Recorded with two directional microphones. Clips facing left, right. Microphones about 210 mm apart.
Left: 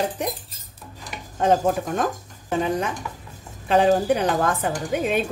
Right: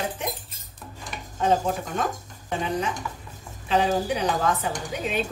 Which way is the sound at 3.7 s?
55° left (ahead or behind).